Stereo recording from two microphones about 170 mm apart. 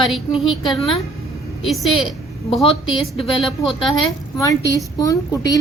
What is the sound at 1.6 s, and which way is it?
A woman's voice, centre (ahead or behind).